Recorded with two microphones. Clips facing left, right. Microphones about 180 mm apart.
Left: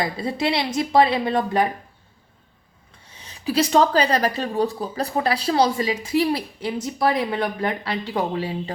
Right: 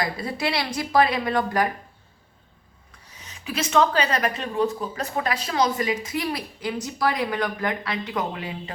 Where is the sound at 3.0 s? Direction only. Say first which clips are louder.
Left 9 dB; 30° left (ahead or behind).